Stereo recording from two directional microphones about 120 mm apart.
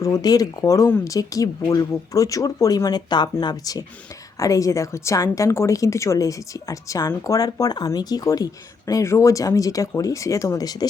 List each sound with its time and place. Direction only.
0.0 s speech: 30° left (ahead or behind)
0.9 s speech: 15° left (ahead or behind)
1.1 s a woman's voice: 30° left (ahead or behind)